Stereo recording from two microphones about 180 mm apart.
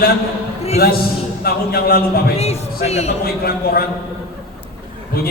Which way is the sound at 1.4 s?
60° left (ahead or behind).